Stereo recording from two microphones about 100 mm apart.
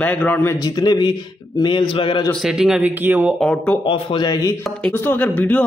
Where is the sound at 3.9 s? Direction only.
60° left (ahead or behind).